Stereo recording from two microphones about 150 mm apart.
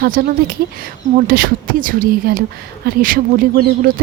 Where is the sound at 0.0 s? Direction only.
80° right.